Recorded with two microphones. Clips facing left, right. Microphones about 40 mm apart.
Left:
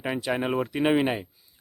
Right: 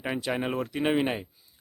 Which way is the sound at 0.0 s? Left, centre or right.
Centre.